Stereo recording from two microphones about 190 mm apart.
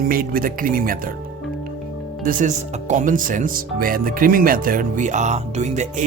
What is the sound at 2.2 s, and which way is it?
Speech, 40° right (ahead or behind).